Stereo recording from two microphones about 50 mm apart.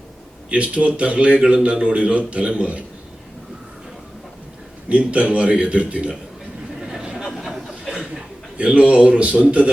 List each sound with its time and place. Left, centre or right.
0.5 s a man's voice: right
4.9 s a man's voice: right
6.8 s a sound: centre
7.3 s chuckle: centre
8.5 s a man's voice: right